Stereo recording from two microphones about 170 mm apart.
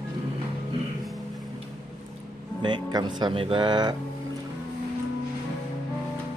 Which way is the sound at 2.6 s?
25° right (ahead or behind).